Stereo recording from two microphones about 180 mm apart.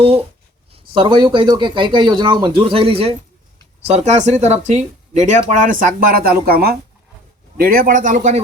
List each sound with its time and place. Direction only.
0.0 s a man's voice: 30° right (ahead or behind)